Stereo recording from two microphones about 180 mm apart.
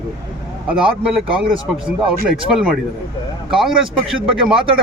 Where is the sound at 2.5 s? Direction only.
5° right (ahead or behind).